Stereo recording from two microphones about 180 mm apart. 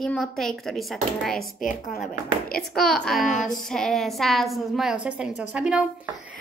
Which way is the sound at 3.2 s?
45° left (ahead or behind).